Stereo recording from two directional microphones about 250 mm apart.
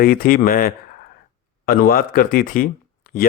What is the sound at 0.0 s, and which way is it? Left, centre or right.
Speech, left.